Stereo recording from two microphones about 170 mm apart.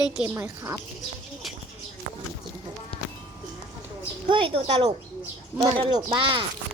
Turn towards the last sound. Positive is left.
turn(degrees=-30)  # may be behind; listen again after turning